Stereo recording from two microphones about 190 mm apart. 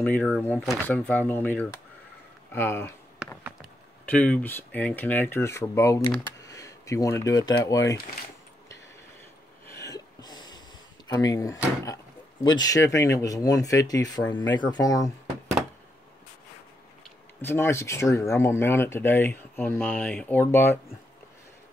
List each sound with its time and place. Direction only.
0.0 s speech: 10° left (ahead or behind)
4.0 s speech: 5° left (ahead or behind)
9.7 s a sound: 15° left (ahead or behind)
11.1 s speech: 20° left (ahead or behind)
17.4 s speech: 10° left (ahead or behind)